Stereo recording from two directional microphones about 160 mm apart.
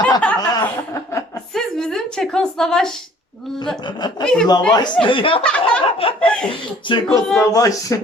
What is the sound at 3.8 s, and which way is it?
Speech, 25° left (ahead or behind).